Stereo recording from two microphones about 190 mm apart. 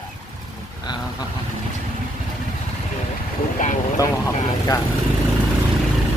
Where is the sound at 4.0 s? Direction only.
20° left (ahead or behind).